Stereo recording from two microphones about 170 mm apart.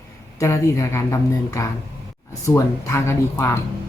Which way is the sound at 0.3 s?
15° left (ahead or behind).